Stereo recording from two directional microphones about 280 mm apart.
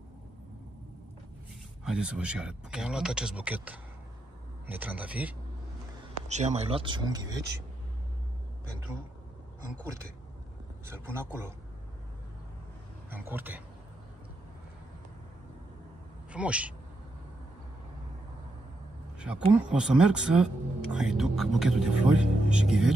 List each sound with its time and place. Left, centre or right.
1.9 s speech: centre
6.2 s speech: right
10.9 s speech: centre
13.1 s speech: centre
16.3 s speech: centre
19.1 s speech: centre